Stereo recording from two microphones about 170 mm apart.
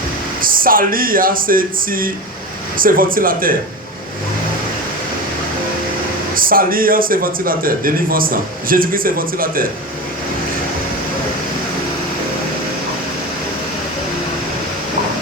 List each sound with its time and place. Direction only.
0.4 s a man's voice: 55° right (ahead or behind)
6.3 s a man's voice: 55° right (ahead or behind)